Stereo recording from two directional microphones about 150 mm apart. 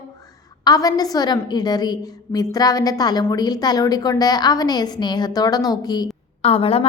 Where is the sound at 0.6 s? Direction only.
25° left (ahead or behind).